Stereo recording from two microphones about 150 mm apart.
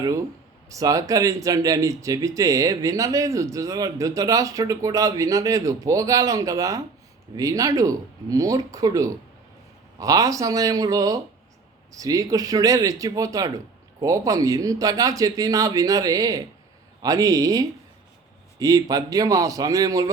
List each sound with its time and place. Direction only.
0.7 s speech: 25° right (ahead or behind)